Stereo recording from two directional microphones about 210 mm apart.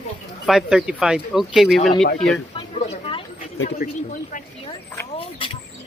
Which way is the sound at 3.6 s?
45° left (ahead or behind).